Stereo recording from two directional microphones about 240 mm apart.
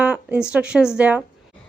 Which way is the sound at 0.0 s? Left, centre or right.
Centre.